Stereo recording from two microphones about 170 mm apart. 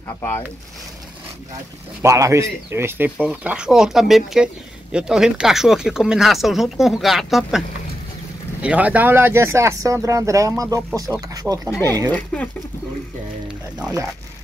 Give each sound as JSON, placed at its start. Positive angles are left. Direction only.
{"t": 0.2, "sound": "speech", "side_deg": 15}
{"t": 2.0, "sound": "speech", "side_deg": -15}
{"t": 8.6, "sound": "speech", "side_deg": -10}
{"t": 11.7, "sound": "speech", "side_deg": 15}